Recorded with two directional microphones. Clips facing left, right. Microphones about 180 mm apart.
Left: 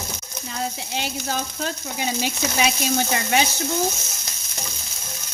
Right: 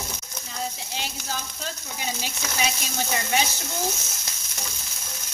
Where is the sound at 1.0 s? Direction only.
65° left (ahead or behind).